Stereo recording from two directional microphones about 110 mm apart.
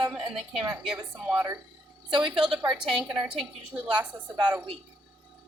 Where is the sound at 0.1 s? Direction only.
5° right (ahead or behind).